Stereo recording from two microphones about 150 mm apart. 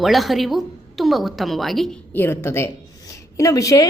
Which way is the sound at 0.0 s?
Centre (ahead or behind).